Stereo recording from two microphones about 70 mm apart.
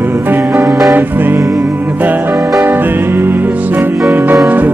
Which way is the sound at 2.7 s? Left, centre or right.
Right.